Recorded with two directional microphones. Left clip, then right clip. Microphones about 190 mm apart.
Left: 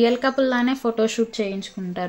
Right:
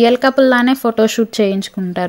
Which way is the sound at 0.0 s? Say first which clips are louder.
Right 8 dB; 35° right (ahead or behind).